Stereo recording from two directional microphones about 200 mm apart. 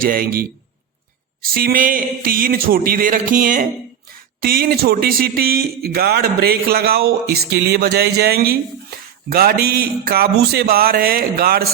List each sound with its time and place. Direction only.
0.0 s speech: 45° right (ahead or behind)
1.5 s speech: 45° right (ahead or behind)